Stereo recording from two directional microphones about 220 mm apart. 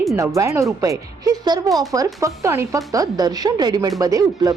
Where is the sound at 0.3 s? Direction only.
15° right (ahead or behind).